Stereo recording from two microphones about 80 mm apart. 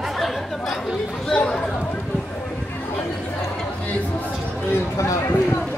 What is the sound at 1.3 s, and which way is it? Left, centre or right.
Chatter, centre.